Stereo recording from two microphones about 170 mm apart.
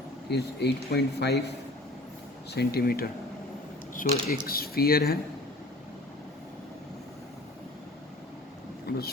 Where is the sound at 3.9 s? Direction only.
50° left (ahead or behind).